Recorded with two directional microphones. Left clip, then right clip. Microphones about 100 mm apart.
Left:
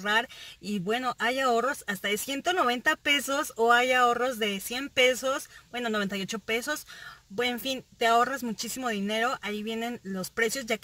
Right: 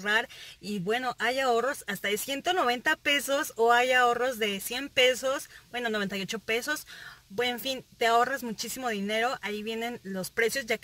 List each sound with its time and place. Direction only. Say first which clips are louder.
0.0 s speech: left 1 dB; 20° left (ahead or behind)